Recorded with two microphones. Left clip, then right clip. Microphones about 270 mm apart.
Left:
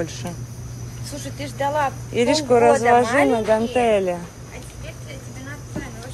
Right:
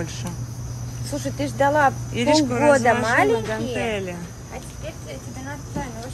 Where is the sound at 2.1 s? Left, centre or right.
Centre.